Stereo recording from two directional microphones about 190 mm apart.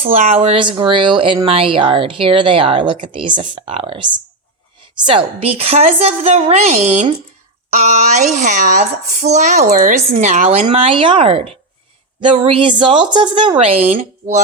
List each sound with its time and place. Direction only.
0.0 s a child's voice: 35° right (ahead or behind)